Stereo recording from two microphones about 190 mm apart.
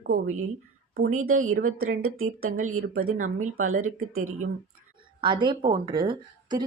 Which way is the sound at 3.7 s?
90° right.